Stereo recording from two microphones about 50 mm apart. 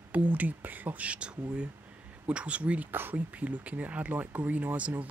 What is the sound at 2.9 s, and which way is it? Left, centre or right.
Speech, right.